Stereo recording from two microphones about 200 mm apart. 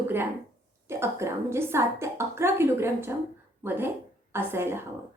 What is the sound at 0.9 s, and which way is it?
A woman's voice, 15° right (ahead or behind).